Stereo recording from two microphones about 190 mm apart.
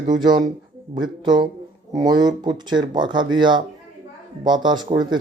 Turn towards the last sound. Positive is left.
turn(degrees=-25)  # may be behind; listen again after turning